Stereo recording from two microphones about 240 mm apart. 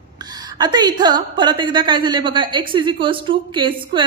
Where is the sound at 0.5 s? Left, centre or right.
Centre.